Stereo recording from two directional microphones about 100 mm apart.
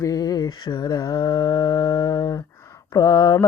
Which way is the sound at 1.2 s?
50° left (ahead or behind).